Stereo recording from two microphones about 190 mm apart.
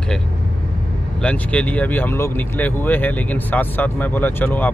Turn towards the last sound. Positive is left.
turn(degrees=10)  # may be behind; listen again after turning